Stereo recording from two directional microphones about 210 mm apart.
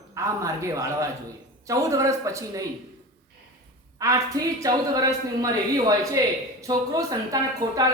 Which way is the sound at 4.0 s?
15° right (ahead or behind).